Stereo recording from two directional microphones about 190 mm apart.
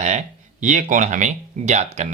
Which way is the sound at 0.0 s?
40° right (ahead or behind).